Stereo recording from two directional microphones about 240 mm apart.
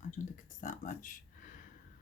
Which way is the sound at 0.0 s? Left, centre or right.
Left.